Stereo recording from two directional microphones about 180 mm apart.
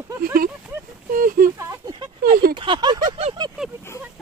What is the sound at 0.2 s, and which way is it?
Speech, 55° right (ahead or behind).